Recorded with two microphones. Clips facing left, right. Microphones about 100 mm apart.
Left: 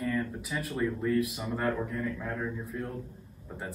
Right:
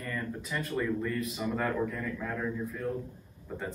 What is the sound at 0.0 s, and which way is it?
A man's voice, 5° left (ahead or behind).